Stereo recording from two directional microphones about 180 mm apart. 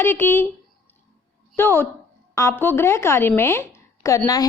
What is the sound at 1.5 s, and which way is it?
Speech, 10° left (ahead or behind).